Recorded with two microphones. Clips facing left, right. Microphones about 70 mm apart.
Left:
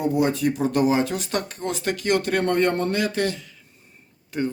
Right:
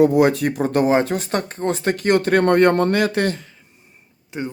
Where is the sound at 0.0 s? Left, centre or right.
Right.